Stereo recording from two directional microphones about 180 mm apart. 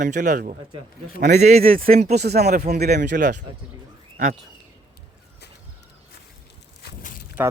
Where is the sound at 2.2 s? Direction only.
65° right (ahead or behind).